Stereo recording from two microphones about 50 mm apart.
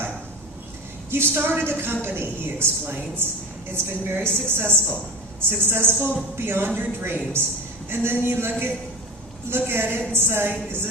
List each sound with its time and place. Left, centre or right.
1.1 s a woman's voice: right